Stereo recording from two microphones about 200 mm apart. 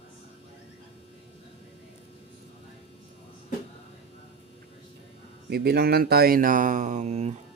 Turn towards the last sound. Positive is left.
turn(degrees=-35)  # may be behind; listen again after turning